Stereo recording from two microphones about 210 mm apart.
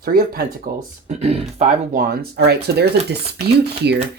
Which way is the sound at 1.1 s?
30° right (ahead or behind).